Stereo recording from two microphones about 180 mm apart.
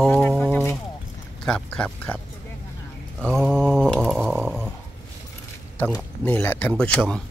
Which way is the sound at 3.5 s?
5° left (ahead or behind).